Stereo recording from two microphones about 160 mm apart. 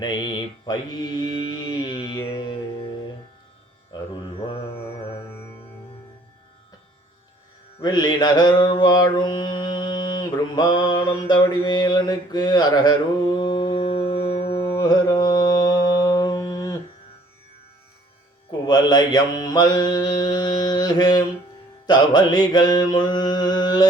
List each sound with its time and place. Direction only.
0.0 s mantra: 30° left (ahead or behind)
2.2 s music: 35° left (ahead or behind)
4.4 s mantra: 35° left (ahead or behind)
7.8 s mantra: 25° left (ahead or behind)
14.5 s mantra: 15° left (ahead or behind)
18.6 s mantra: 25° left (ahead or behind)